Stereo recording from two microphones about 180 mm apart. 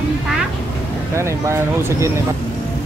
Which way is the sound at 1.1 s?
15° right (ahead or behind).